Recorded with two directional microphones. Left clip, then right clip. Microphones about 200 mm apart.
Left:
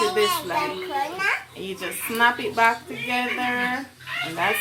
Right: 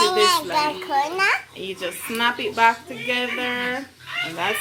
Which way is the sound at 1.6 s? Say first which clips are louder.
Right 2 dB; 5° right (ahead or behind).